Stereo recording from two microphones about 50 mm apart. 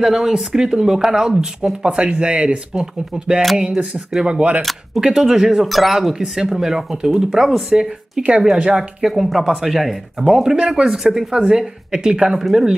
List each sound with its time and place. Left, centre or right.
0.0 s speech: centre
6.1 s speech: centre